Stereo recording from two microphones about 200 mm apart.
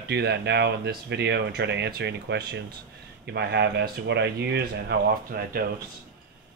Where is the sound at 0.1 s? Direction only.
55° right (ahead or behind).